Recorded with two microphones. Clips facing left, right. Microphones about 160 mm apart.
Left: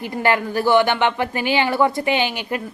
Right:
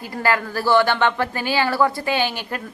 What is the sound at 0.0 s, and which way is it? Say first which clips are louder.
A woman's voice: left 2 dB; 20° left (ahead or behind).